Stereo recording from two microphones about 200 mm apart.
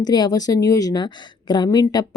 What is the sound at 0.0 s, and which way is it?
A woman's voice, 20° left (ahead or behind).